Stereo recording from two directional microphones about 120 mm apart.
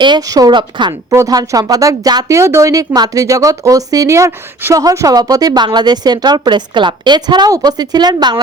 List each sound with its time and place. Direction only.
0.0 s a woman's voice: 35° right (ahead or behind)
1.1 s a woman's voice: 30° right (ahead or behind)